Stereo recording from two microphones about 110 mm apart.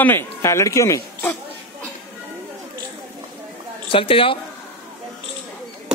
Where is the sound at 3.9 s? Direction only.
55° left (ahead or behind).